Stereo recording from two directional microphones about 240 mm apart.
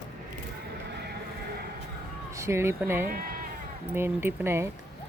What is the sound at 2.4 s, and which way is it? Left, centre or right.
Speech, centre.